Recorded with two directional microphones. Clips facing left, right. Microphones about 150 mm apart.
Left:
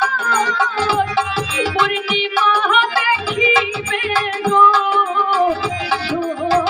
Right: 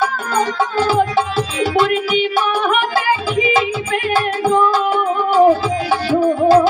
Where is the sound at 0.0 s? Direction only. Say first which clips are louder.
Right 1 dB; 45° right (ahead or behind).